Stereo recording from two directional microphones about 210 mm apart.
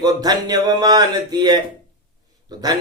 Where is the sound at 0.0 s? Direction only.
20° right (ahead or behind).